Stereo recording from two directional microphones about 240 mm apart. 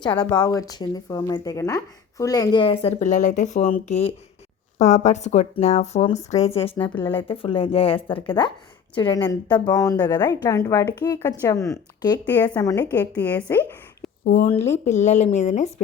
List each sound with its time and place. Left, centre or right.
0.1 s a woman's voice: centre
6.9 s a woman's voice: centre
7.3 s a woman's voice: left
14.3 s speech: left